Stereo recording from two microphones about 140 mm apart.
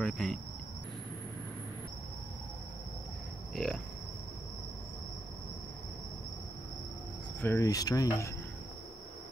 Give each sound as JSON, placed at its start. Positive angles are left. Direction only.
{"t": 0.0, "sound": "speech", "side_deg": 0}
{"t": 3.5, "sound": "speech", "side_deg": 5}
{"t": 7.4, "sound": "speech", "side_deg": 20}